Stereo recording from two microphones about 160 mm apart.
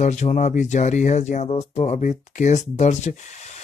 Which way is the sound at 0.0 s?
45° left (ahead or behind).